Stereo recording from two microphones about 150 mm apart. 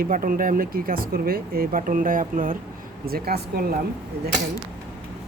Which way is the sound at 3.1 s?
85° right.